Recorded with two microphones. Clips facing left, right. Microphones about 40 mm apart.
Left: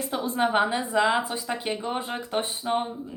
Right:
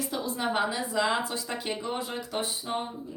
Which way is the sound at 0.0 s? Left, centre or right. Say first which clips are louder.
Left 5 dB; left.